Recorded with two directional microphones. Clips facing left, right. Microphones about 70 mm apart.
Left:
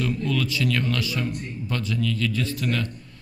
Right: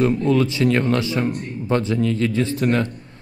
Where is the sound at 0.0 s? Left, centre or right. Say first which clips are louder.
Right 8 dB; right.